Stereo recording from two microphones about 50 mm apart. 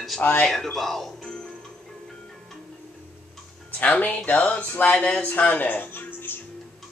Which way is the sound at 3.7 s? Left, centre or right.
Left.